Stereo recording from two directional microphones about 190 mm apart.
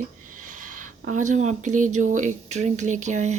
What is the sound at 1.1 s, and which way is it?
Speech, 40° right (ahead or behind).